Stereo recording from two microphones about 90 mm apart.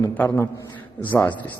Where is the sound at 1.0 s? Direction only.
20° left (ahead or behind).